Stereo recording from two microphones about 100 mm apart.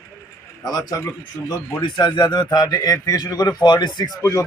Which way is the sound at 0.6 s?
40° left (ahead or behind).